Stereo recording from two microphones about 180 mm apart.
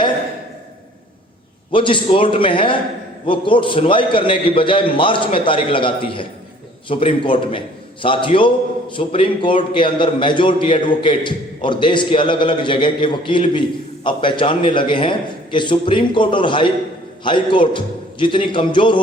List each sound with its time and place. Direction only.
1.7 s a man's voice: 30° left (ahead or behind)